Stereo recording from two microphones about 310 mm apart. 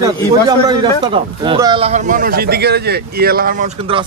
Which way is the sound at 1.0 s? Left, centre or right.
Centre.